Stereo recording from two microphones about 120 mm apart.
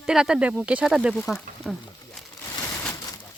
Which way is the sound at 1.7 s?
5° left (ahead or behind).